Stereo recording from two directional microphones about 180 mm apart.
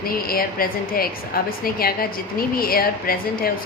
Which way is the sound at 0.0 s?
55° left (ahead or behind).